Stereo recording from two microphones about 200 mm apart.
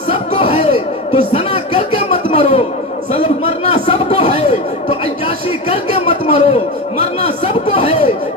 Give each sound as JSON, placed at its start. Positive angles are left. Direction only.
{"t": 0.1, "sound": "a sound", "side_deg": 25}
{"t": 3.1, "sound": "a man's voice", "side_deg": 30}
{"t": 5.6, "sound": "speech", "side_deg": 30}